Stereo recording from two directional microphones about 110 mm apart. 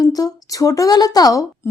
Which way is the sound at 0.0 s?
35° left (ahead or behind).